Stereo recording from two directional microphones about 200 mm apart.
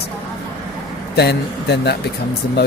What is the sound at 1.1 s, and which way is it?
Speech, 55° left (ahead or behind).